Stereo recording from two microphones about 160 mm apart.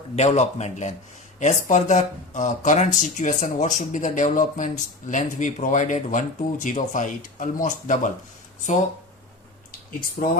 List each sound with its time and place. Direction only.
0.2 s speech: 45° left (ahead or behind)
10.2 s speech: 55° left (ahead or behind)